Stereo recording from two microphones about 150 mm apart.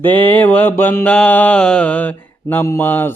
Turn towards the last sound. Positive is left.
turn(degrees=15)  # may be behind; listen again after turning